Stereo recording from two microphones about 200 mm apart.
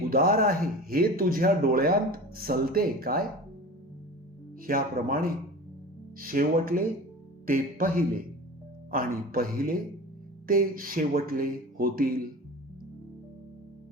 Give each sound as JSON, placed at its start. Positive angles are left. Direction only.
{"t": 0.1, "sound": "speech", "side_deg": -45}
{"t": 4.6, "sound": "speech", "side_deg": -45}